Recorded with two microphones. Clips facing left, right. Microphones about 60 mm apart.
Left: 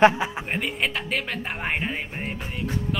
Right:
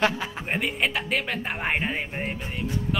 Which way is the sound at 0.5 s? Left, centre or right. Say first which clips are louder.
Right 1 dB; centre.